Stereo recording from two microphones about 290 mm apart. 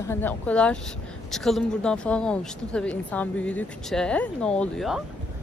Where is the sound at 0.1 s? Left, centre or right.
Centre.